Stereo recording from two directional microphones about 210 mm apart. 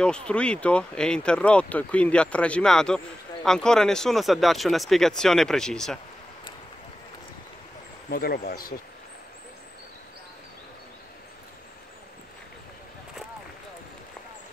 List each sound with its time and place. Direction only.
0.0 s speech: 5° left (ahead or behind)
8.1 s speech: 45° left (ahead or behind)